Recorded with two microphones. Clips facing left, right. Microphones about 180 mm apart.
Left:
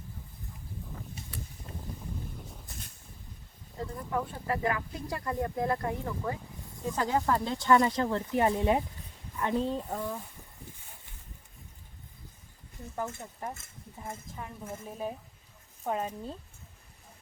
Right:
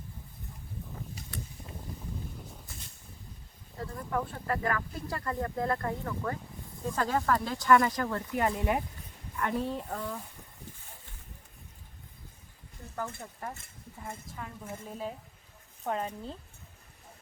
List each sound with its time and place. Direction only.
2.4 s a sound: centre (ahead or behind)
3.9 s speech: centre (ahead or behind)
6.4 s snake: centre (ahead or behind)
6.9 s speech: 20° left (ahead or behind)
13.0 s speech: 15° left (ahead or behind)